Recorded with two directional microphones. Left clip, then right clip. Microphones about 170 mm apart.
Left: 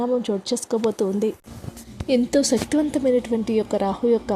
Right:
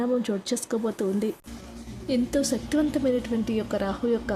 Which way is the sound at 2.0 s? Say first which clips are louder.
Left 6 dB; 35° left (ahead or behind).